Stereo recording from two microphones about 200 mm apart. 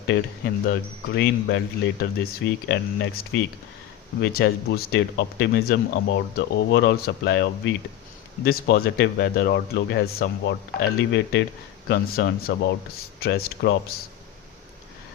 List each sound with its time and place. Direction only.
0.1 s speech: 60° left (ahead or behind)
11.9 s speech: 50° left (ahead or behind)